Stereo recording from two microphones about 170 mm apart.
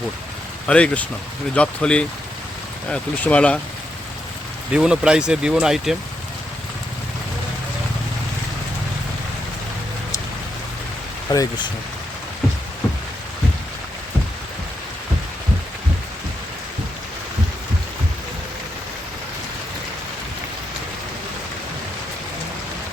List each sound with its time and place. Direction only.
0.7 s speech: 5° left (ahead or behind)
4.7 s speech: 5° right (ahead or behind)
11.3 s speech: 25° left (ahead or behind)